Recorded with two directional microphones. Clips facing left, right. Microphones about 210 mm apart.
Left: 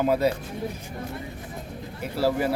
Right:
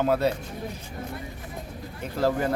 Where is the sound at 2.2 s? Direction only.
10° left (ahead or behind).